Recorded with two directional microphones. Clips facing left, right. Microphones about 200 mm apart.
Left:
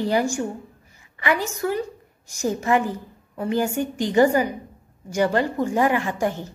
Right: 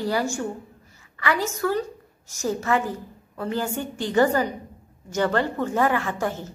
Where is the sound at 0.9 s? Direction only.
15° left (ahead or behind).